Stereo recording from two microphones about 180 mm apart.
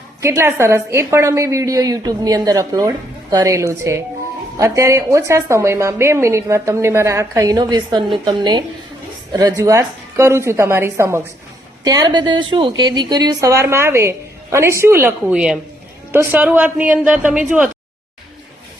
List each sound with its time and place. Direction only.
0.2 s a woman's voice: 15° right (ahead or behind)